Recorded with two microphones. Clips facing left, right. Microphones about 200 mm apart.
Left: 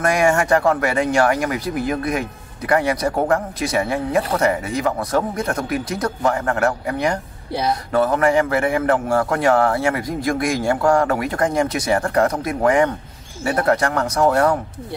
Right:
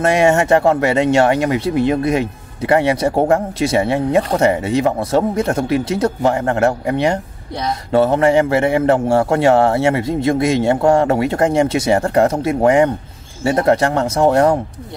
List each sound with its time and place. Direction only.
0.0 s speech: 25° right (ahead or behind)